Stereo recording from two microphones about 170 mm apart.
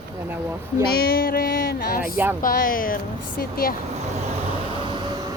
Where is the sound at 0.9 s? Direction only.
65° left (ahead or behind).